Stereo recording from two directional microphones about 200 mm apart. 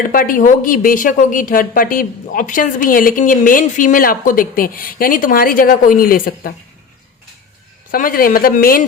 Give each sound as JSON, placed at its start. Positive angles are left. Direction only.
{"t": 0.1, "sound": "speech", "side_deg": 45}
{"t": 7.9, "sound": "speech", "side_deg": 45}